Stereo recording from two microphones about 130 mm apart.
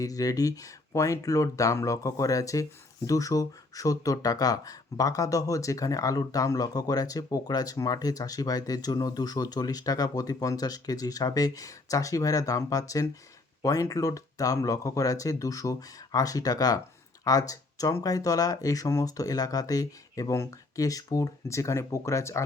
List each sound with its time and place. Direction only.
0.0 s speech: 25° left (ahead or behind)